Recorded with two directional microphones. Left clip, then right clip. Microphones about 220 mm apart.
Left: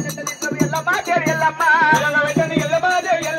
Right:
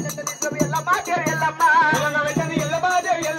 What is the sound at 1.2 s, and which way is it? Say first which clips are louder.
Music: left 2 dB; 25° left (ahead or behind).